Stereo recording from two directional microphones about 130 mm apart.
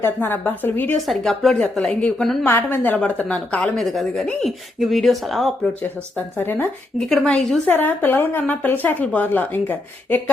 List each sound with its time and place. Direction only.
0.0 s a woman's voice: 15° left (ahead or behind)
1.0 s a woman's voice: centre (ahead or behind)
2.4 s a woman's voice: 15° left (ahead or behind)
6.1 s a woman's voice: 15° left (ahead or behind)
7.1 s a woman's voice: 5° left (ahead or behind)